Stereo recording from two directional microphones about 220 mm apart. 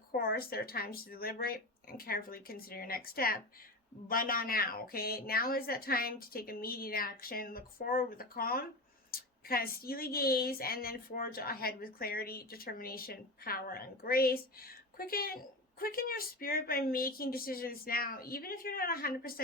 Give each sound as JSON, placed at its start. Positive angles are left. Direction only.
{"t": 0.1, "sound": "a woman's voice", "side_deg": 45}